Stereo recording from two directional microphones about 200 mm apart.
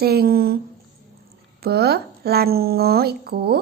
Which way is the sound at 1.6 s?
55° right (ahead or behind).